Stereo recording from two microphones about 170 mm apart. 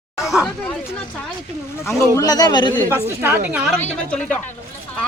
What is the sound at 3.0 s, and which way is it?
Speech, 10° right (ahead or behind).